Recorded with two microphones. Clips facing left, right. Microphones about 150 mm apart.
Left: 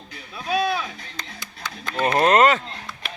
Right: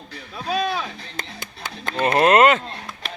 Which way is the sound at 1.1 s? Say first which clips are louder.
Right 3 dB; 55° right (ahead or behind).